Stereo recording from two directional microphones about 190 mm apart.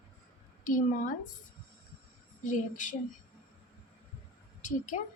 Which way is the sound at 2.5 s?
40° left (ahead or behind).